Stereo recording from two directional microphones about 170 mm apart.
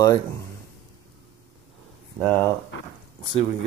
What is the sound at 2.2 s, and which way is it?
Speech, 5° left (ahead or behind).